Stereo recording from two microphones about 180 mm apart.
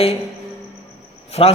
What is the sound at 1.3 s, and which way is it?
Speech, 35° left (ahead or behind).